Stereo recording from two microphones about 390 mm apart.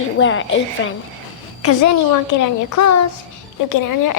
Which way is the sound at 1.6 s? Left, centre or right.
Left.